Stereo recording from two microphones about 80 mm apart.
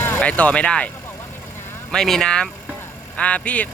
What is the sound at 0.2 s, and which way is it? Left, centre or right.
Speech, centre.